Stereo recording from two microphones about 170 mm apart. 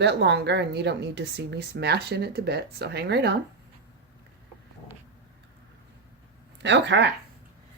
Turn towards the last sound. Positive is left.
turn(degrees=-90)